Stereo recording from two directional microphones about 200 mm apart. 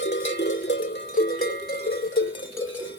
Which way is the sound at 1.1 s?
50° left (ahead or behind).